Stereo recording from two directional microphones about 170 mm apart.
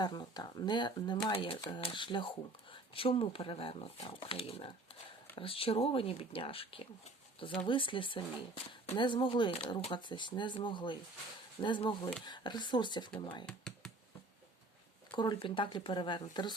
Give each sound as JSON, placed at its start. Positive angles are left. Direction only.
{"t": 0.0, "sound": "speech", "side_deg": 25}
{"t": 13.4, "sound": "computer keyboard", "side_deg": 5}
{"t": 15.1, "sound": "speech", "side_deg": 30}